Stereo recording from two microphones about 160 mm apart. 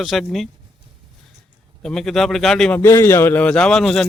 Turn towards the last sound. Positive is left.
turn(degrees=0)  # may be behind; listen again after turning